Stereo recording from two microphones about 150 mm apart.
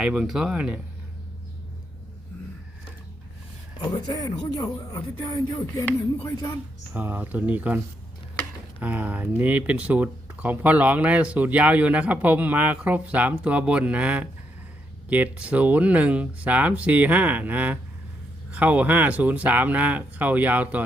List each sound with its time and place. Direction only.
0.0 s speech: 5° right (ahead or behind)
3.8 s speech: 30° left (ahead or behind)
6.9 s speech: 10° right (ahead or behind)
8.8 s speech: 10° right (ahead or behind)